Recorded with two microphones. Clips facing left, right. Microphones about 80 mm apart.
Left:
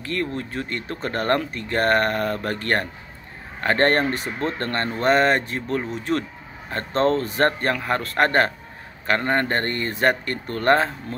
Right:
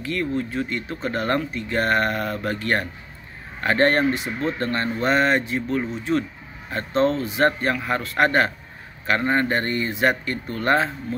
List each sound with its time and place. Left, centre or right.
0.0 s speech: left